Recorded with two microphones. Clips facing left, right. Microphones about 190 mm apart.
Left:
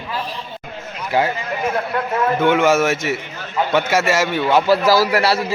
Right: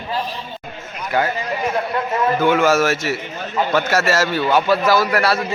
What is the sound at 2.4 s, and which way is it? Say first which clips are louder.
A man's voice: left 1 dB; 20° left (ahead or behind).